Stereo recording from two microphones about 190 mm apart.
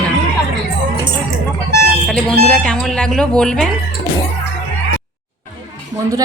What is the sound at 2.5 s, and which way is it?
Speech, 5° left (ahead or behind).